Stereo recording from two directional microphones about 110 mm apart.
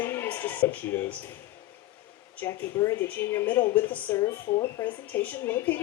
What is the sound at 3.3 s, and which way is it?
A woman's voice, 15° left (ahead or behind).